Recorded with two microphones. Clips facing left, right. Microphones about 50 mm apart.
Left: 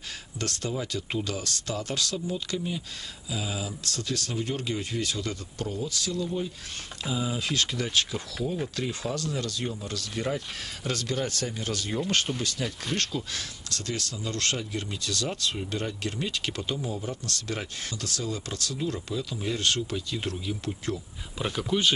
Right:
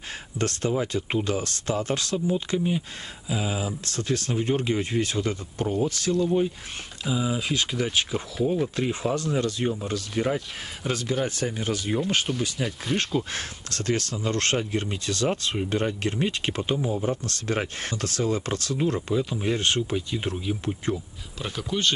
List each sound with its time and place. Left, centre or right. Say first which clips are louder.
0.4 s speech: right 6 dB; right
5.8 s speech: right 8 dB; right
7.0 s speech: right 4 dB; centre
13.3 s speech: right 3 dB; right
21.4 s speech: left 1 dB; centre